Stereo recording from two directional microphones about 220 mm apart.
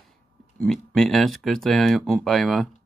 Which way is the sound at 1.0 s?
Centre (ahead or behind).